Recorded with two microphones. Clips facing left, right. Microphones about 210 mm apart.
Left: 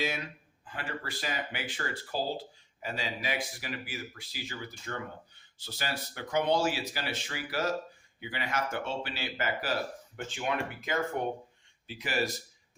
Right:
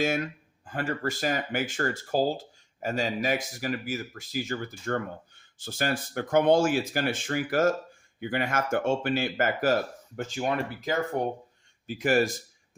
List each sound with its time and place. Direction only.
0.0 s speech: 50° right (ahead or behind)
11.9 s speech: 50° right (ahead or behind)